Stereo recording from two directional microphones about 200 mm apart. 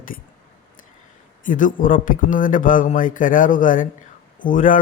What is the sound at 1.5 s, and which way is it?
A man's voice, 40° left (ahead or behind).